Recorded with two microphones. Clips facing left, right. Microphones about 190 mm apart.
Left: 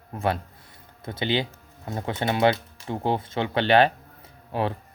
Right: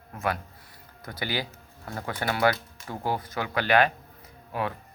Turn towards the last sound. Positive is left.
turn(degrees=30)  # may be behind; listen again after turning